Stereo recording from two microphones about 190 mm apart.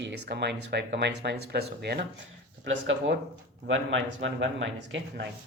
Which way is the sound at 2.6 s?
75° right (ahead or behind).